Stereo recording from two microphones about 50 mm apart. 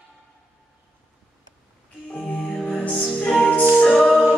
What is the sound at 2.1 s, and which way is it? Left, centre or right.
Music, left.